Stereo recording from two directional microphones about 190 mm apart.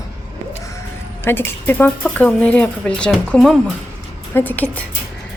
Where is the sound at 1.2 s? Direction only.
10° left (ahead or behind).